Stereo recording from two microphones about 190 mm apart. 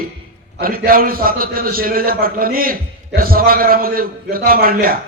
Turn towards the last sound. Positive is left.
turn(degrees=-50)  # may be behind; listen again after turning